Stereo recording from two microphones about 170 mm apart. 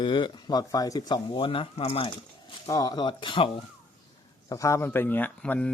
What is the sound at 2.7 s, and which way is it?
Speech, 20° left (ahead or behind).